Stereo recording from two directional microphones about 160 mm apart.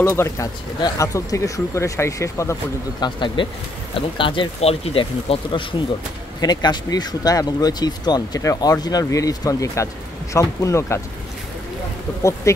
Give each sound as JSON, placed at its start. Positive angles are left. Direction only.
{"t": 0.0, "sound": "speech", "side_deg": 20}
{"t": 3.0, "sound": "speech", "side_deg": 30}
{"t": 12.2, "sound": "speech", "side_deg": 20}